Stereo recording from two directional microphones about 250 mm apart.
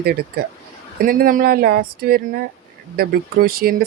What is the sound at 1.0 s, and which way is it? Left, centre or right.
Speech, right.